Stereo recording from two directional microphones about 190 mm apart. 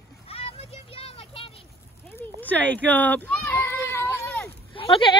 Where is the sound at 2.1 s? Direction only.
10° left (ahead or behind).